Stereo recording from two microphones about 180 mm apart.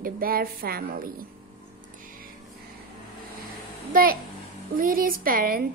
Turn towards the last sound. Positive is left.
turn(degrees=-55)  # may be behind; listen again after turning